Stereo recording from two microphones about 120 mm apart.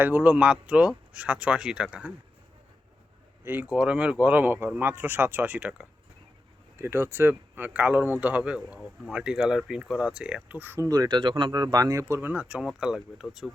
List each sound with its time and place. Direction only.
0.0 s speech: 15° right (ahead or behind)
3.4 s speech: 15° right (ahead or behind)
6.7 s speech: 20° right (ahead or behind)
10.8 s speech: 30° right (ahead or behind); by 13.5 s 5° right (ahead or behind)